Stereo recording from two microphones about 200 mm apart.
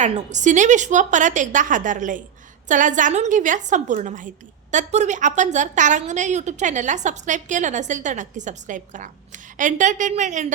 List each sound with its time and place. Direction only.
0.0 s a woman's voice: 35° right (ahead or behind)